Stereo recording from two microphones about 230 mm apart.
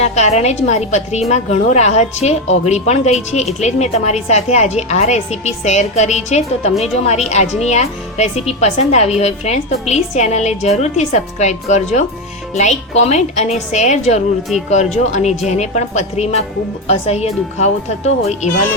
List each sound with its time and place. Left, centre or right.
0.0 s a woman's voice: left